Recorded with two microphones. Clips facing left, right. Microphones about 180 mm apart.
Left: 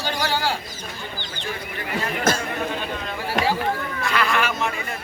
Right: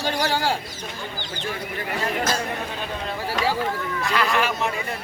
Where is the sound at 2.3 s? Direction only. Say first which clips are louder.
Left 8 dB; 50° left (ahead or behind).